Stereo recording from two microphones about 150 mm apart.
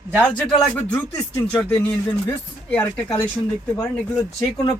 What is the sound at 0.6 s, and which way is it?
Speech, 10° left (ahead or behind).